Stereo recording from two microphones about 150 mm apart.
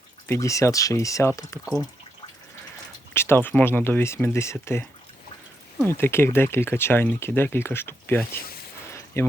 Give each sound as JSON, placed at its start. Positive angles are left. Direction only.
{"t": 0.3, "sound": "speech", "side_deg": 20}
{"t": 1.6, "sound": "speech", "side_deg": -5}
{"t": 3.2, "sound": "speech", "side_deg": 15}